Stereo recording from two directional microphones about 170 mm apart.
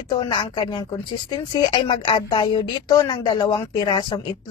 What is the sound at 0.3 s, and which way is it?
Speech, 25° left (ahead or behind).